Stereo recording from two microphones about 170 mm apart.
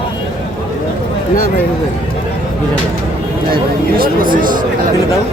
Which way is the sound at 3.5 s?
60° right (ahead or behind).